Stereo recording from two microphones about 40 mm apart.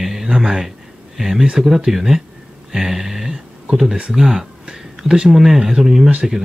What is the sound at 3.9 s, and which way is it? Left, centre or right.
Speech, centre.